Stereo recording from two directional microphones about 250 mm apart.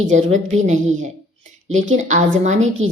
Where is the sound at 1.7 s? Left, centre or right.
Right.